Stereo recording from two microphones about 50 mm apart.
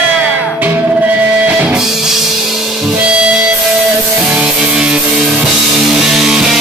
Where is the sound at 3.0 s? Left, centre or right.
Right.